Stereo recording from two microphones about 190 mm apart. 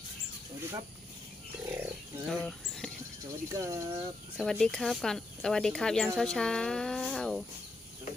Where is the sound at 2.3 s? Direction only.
Centre (ahead or behind).